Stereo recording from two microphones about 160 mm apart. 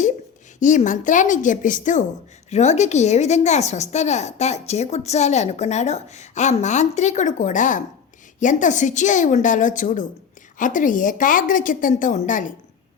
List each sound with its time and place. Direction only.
0.6 s a woman's voice: 50° left (ahead or behind)